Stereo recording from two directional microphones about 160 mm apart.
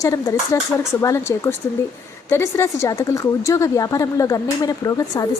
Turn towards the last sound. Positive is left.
turn(degrees=20)  # may be behind; listen again after turning